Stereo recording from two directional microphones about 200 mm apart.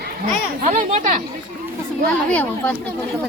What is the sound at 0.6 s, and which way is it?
Speech, 35° right (ahead or behind).